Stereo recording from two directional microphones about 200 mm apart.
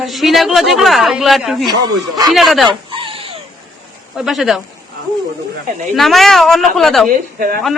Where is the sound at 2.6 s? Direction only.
25° right (ahead or behind).